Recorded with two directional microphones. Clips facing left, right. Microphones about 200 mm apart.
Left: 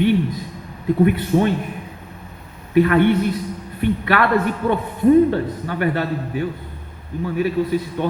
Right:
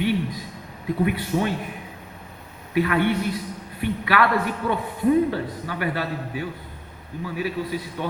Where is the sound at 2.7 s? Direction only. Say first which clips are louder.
Left 7 dB; 50° left (ahead or behind).